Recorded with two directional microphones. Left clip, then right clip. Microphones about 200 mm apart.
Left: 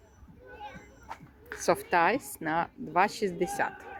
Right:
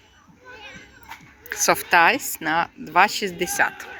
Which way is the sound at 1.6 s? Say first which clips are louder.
Right 9 dB; centre (ahead or behind).